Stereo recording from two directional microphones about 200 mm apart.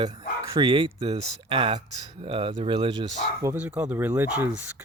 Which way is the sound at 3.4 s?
5° right (ahead or behind).